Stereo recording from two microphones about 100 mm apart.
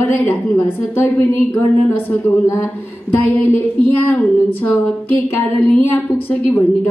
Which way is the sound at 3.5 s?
15° left (ahead or behind).